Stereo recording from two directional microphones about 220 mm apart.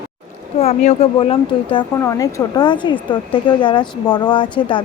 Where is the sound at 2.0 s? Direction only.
15° left (ahead or behind).